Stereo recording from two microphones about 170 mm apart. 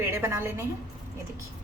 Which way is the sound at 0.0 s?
15° right (ahead or behind).